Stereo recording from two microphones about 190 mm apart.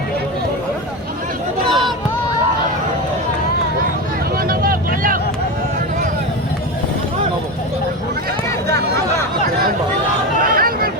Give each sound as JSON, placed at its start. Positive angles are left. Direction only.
{"t": 1.6, "sound": "run", "side_deg": 0}
{"t": 4.4, "sound": "vehicle", "side_deg": -50}
{"t": 10.4, "sound": "chatter", "side_deg": -50}